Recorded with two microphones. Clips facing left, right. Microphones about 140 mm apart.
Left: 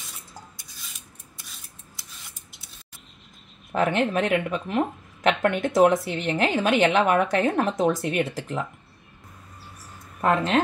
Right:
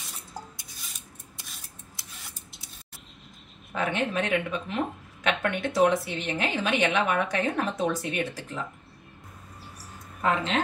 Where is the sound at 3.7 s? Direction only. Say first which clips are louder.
Left 5 dB; 50° left (ahead or behind).